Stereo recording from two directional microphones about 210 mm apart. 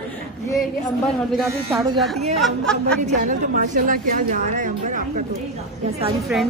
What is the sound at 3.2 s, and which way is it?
A woman's voice, 40° right (ahead or behind).